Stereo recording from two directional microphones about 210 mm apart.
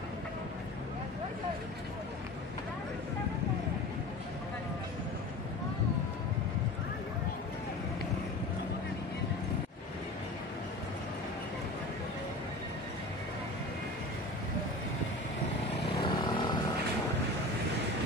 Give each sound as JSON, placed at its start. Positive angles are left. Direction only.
{"t": 16.0, "sound": "vehicle", "side_deg": 20}